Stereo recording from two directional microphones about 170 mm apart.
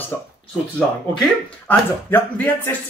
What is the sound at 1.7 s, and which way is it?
Speech, 10° left (ahead or behind).